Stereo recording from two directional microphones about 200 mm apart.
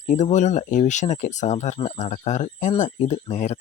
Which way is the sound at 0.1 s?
35° left (ahead or behind).